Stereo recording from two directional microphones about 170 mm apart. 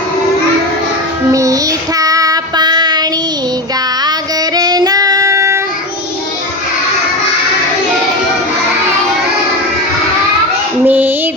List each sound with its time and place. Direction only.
1.3 s child singing: 20° right (ahead or behind)
4.5 s child singing: 25° right (ahead or behind)
10.8 s female singing: 10° right (ahead or behind)